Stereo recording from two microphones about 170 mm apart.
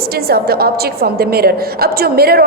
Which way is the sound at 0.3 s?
65° right (ahead or behind).